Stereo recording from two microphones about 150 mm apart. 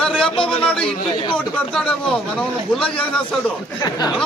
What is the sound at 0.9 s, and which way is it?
Speech, 35° left (ahead or behind).